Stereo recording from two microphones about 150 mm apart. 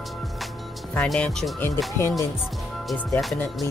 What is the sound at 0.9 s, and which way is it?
Speech, 5° left (ahead or behind).